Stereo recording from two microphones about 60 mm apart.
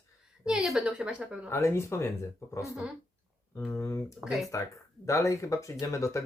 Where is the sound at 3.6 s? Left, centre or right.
Left.